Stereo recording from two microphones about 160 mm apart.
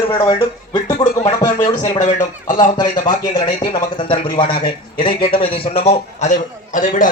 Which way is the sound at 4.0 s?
30° left (ahead or behind).